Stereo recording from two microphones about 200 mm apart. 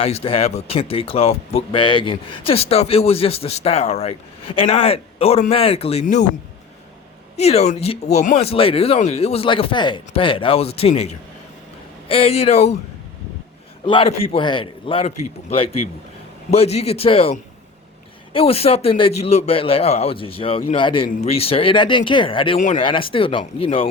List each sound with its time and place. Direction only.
0.0 s speech: 30° left (ahead or behind)
7.3 s speech: 30° left (ahead or behind)
13.8 s speech: 25° left (ahead or behind)